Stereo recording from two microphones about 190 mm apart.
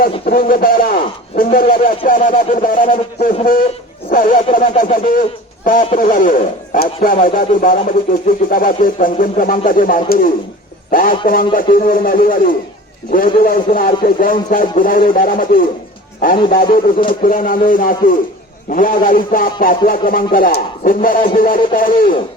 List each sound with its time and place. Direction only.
0.3 s speech: 50° left (ahead or behind)